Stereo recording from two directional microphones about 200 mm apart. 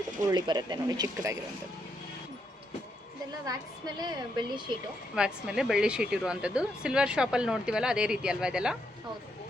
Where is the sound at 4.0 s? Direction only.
20° right (ahead or behind).